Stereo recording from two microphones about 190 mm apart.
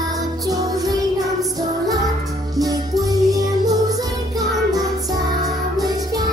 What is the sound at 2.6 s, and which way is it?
Music, 20° right (ahead or behind).